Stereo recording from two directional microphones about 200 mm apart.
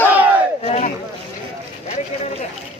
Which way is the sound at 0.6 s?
30° left (ahead or behind).